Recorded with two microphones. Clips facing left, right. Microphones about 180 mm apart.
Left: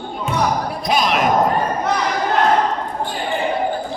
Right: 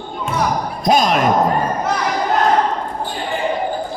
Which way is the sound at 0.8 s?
45° right (ahead or behind).